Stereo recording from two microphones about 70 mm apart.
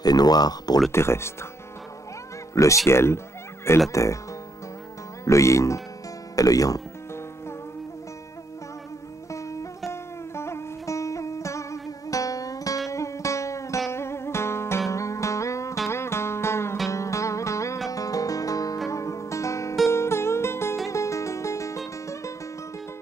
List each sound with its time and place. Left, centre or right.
0.0 s speech: left
0.9 s speech: left
2.5 s speech: left
5.2 s speech: left
9.3 s music: left